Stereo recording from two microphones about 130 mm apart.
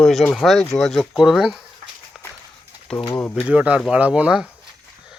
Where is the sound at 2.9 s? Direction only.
20° left (ahead or behind).